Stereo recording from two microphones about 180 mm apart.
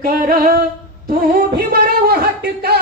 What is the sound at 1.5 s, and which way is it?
Speech, 55° right (ahead or behind).